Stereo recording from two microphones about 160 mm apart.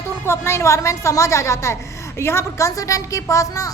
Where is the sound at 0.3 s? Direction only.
15° left (ahead or behind).